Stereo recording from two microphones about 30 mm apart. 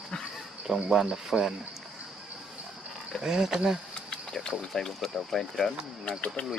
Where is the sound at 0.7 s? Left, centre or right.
Centre.